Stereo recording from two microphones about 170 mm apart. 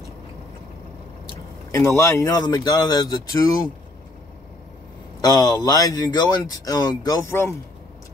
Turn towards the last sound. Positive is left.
turn(degrees=20)  # may be behind; listen again after turning